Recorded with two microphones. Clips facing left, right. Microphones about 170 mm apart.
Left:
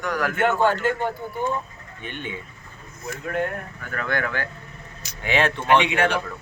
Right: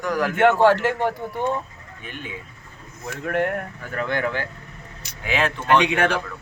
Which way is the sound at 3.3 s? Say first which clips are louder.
Right 3 dB; 75° right (ahead or behind).